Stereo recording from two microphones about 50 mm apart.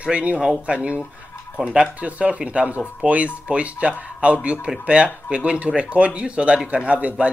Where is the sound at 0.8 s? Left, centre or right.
Right.